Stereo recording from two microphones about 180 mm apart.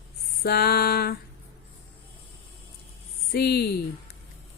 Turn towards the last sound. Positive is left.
turn(degrees=60)  # may be behind; listen again after turning